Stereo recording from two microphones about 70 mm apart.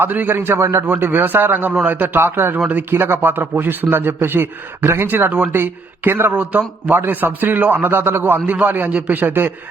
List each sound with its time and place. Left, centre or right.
0.0 s a man's voice: right
0.9 s speech: right